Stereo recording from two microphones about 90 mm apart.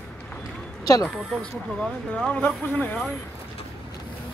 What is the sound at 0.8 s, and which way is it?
Speech, 45° left (ahead or behind).